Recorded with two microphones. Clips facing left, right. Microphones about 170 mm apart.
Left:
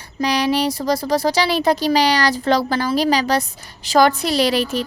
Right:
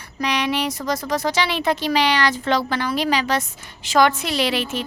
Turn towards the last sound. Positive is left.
turn(degrees=40)  # may be behind; listen again after turning